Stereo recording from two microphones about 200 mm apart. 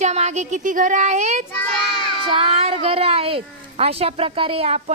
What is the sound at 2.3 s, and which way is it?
Speech, 25° right (ahead or behind).